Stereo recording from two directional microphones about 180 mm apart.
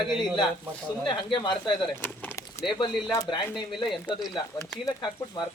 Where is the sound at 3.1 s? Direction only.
20° left (ahead or behind).